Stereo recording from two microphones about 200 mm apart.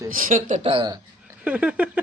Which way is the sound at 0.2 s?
40° right (ahead or behind).